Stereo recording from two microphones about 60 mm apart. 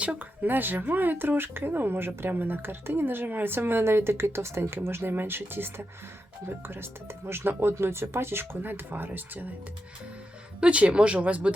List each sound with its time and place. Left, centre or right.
0.0 s speech: right
7.3 s speech: right
10.6 s speech: right